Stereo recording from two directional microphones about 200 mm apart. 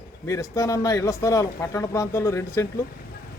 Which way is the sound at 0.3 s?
15° left (ahead or behind).